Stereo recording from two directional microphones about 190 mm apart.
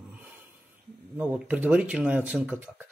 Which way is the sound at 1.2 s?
5° right (ahead or behind).